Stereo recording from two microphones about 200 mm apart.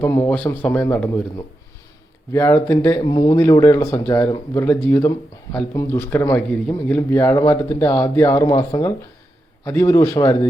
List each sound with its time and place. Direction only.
0.0 s speech: 10° left (ahead or behind)
2.3 s speech: 10° left (ahead or behind)
3.0 s speech: 20° left (ahead or behind)
7.9 s speech: 25° left (ahead or behind)